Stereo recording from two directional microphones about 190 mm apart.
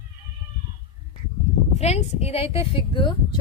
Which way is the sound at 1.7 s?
35° left (ahead or behind).